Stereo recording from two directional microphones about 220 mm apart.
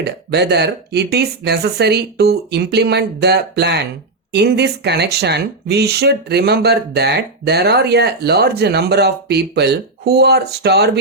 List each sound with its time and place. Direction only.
0.0 s speech: 50° right (ahead or behind)